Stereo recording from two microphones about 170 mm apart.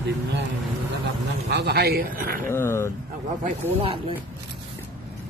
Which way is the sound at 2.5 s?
15° left (ahead or behind).